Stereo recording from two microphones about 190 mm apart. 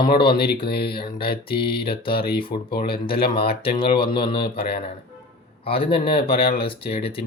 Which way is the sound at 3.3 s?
30° left (ahead or behind).